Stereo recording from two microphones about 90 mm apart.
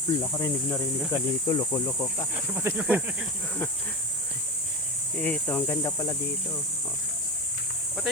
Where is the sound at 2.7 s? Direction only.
30° right (ahead or behind).